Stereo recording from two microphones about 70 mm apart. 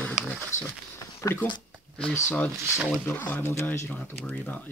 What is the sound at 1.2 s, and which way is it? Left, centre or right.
Speech, left.